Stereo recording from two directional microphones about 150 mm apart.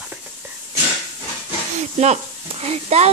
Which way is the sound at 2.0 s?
45° right (ahead or behind).